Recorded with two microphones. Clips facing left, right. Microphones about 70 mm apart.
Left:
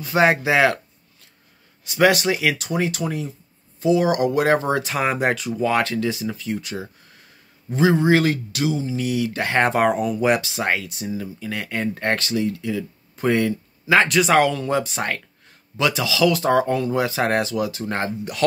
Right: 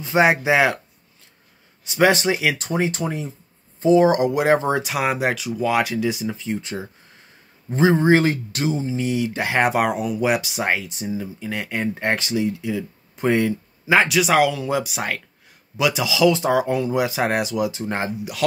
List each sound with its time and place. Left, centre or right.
0.0 s speech: centre
1.9 s speech: right
4.8 s speech: centre; by 9.5 s right
9.5 s speech: centre
10.4 s speech: centre
13.9 s speech: centre
15.8 s speech: centre
16.4 s speech: centre